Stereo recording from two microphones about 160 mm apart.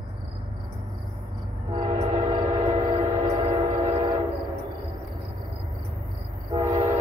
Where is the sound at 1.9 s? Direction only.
45° right (ahead or behind).